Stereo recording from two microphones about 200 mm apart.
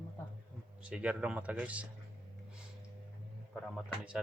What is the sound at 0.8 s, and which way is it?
Speech, 5° right (ahead or behind).